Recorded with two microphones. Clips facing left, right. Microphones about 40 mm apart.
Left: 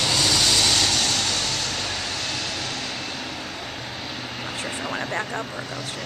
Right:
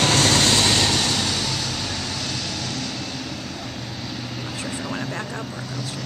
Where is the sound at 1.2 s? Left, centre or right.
Centre.